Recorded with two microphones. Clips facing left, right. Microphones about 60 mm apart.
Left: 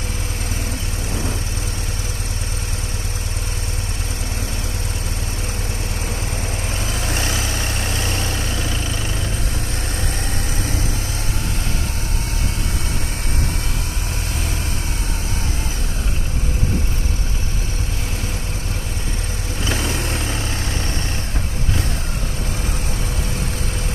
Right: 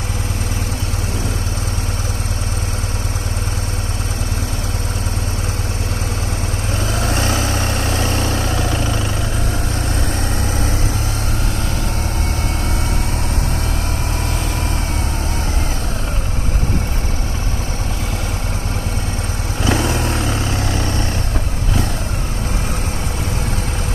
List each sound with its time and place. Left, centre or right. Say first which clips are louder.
6.9 s vehicle: right 5 dB; right
19.6 s vehicle: right 6 dB; right